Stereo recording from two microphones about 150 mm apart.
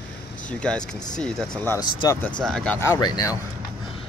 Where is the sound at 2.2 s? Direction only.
5° left (ahead or behind).